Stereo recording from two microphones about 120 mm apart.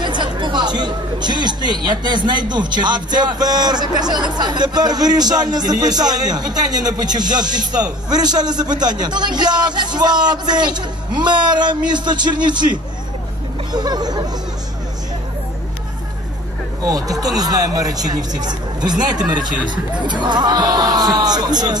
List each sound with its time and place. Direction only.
0.0 s speech: 40° right (ahead or behind)
13.7 s speech: 35° right (ahead or behind)
16.8 s speech: 30° right (ahead or behind)